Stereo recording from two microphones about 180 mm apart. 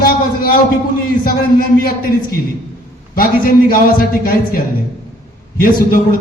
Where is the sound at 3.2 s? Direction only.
50° left (ahead or behind).